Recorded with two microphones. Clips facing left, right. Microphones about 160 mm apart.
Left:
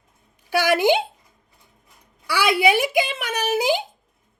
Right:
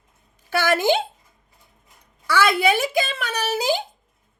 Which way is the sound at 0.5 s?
15° left (ahead or behind).